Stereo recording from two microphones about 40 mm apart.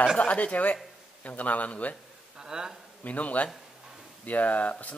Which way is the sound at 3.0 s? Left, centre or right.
Left.